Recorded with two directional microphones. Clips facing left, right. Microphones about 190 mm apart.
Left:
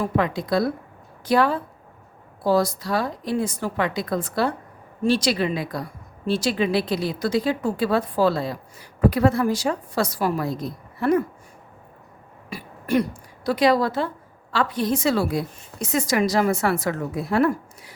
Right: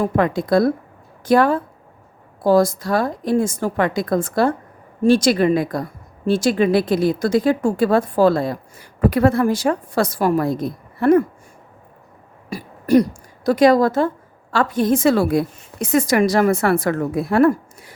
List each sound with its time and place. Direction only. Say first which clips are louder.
0.0 s a woman's voice: right 5 dB; 50° right (ahead or behind)
12.5 s a woman's voice: right 7 dB; 40° right (ahead or behind)